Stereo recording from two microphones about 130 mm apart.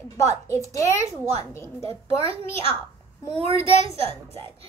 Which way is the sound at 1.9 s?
45° right (ahead or behind).